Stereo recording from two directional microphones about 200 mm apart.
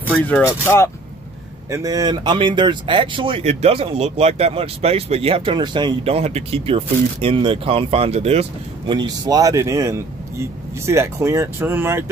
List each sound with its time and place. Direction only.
0.1 s speech: 10° left (ahead or behind)
1.7 s speech: 15° right (ahead or behind)